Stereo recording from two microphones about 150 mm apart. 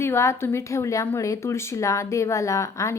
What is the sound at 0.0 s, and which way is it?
A woman's voice, 15° left (ahead or behind).